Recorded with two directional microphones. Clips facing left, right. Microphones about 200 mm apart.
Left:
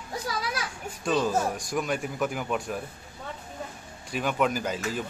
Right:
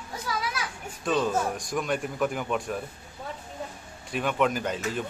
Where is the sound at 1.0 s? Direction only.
Centre (ahead or behind).